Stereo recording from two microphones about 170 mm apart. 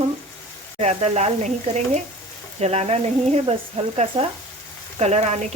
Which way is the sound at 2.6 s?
40° right (ahead or behind).